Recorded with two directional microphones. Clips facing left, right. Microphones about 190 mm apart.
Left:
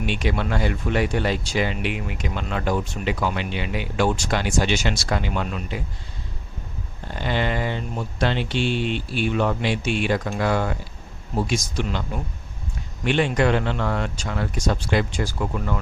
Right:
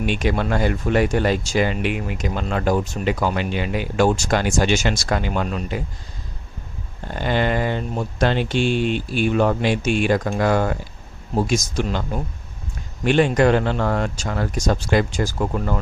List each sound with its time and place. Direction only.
0.0 s speech: 45° right (ahead or behind)
7.2 s speech: 45° right (ahead or behind)
13.1 s speech: 45° right (ahead or behind)